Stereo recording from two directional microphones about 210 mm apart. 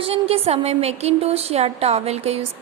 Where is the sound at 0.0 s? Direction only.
30° right (ahead or behind).